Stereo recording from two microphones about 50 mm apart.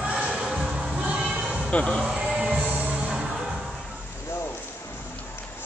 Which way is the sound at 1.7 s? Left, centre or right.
Left.